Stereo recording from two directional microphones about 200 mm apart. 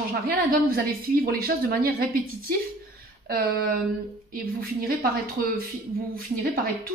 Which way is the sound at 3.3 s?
50° right (ahead or behind).